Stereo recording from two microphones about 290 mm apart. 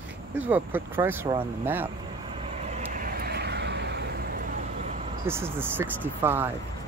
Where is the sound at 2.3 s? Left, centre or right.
Right.